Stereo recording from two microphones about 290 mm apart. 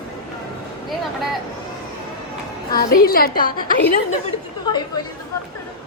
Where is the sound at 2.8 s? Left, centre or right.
Left.